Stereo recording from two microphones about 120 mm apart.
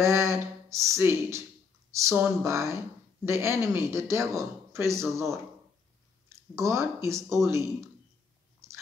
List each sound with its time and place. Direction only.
0.0 s speech: 25° right (ahead or behind)
6.2 s speech: 25° right (ahead or behind)